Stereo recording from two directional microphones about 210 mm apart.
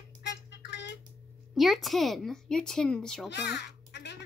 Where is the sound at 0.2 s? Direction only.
55° left (ahead or behind).